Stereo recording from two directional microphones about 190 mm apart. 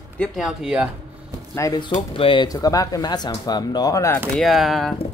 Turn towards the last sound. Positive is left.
turn(degrees=0)  # may be behind; listen again after turning